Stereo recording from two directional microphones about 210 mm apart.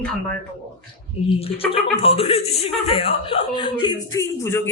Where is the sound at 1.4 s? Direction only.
25° left (ahead or behind).